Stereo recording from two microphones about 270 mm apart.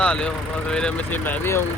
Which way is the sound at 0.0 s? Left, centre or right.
Centre.